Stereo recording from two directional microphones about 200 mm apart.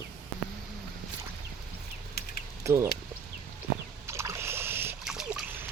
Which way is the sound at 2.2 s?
50° left (ahead or behind).